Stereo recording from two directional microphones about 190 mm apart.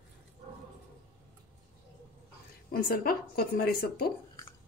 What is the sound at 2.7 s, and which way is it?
Speech, 50° left (ahead or behind).